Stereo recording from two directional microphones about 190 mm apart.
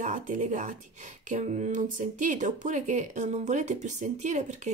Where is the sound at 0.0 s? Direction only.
40° right (ahead or behind).